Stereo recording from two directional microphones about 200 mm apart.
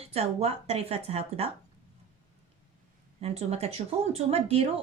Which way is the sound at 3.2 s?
30° right (ahead or behind).